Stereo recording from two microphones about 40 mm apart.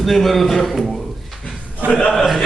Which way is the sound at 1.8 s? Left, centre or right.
Right.